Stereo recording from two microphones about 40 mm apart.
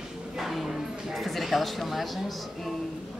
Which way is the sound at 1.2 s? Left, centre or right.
Centre.